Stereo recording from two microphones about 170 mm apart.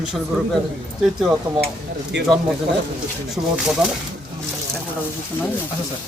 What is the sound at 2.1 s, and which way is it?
Speech, 90° right.